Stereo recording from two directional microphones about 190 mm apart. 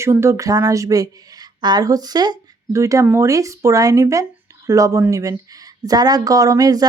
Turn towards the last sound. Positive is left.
turn(degrees=-20)  # may be behind; listen again after turning